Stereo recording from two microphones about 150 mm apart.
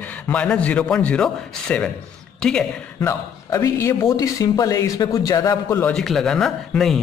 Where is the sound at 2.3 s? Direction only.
5° left (ahead or behind).